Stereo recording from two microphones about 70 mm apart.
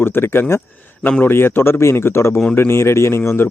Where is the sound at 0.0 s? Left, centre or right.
Left.